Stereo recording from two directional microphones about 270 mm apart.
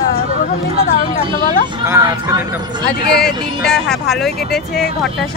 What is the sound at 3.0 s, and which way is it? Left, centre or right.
Speech, left.